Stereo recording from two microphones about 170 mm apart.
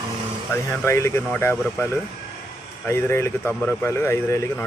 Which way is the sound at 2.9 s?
15° left (ahead or behind).